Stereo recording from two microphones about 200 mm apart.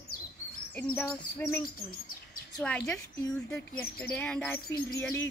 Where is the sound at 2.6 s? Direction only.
5° left (ahead or behind).